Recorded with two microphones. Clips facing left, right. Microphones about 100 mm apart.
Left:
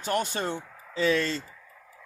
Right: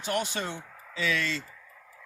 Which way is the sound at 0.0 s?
45° left (ahead or behind).